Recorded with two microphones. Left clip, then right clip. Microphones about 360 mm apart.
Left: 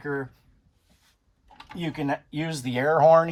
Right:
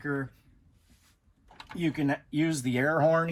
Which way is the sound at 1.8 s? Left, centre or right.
Centre.